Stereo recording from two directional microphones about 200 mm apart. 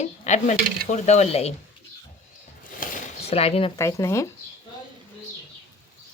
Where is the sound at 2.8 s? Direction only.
35° left (ahead or behind).